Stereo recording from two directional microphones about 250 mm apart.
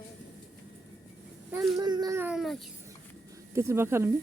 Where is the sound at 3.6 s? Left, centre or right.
Centre.